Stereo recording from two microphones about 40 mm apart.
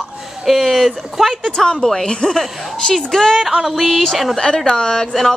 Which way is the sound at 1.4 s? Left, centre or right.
Centre.